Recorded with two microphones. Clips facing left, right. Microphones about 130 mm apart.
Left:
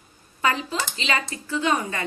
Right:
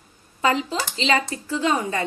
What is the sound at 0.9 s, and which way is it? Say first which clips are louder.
Speech: right 5 dB; 30° right (ahead or behind).